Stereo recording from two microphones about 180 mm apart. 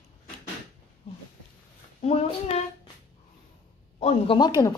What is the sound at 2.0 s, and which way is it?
Speech, 35° left (ahead or behind).